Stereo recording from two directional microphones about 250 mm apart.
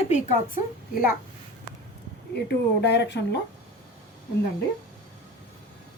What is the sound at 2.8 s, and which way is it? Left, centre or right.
Speech, left.